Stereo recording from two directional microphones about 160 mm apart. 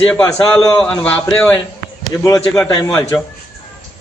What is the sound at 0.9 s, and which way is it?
Speech, 20° left (ahead or behind).